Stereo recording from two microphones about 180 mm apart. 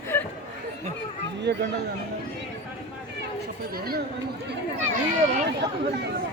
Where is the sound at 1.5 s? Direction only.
65° right (ahead or behind).